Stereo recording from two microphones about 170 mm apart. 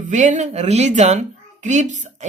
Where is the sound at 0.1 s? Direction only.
45° right (ahead or behind).